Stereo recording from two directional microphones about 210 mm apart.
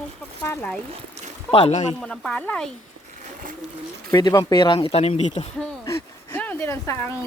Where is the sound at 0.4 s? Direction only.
10° left (ahead or behind).